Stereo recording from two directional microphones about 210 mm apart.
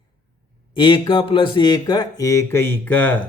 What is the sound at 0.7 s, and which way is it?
Speech, 20° left (ahead or behind).